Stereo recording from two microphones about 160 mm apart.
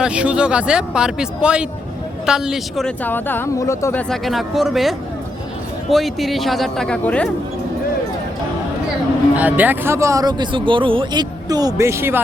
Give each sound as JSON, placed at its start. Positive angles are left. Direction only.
{"t": 0.0, "sound": "a man's voice", "side_deg": -5}
{"t": 3.9, "sound": "a man's voice", "side_deg": 0}
{"t": 9.3, "sound": "speech", "side_deg": -10}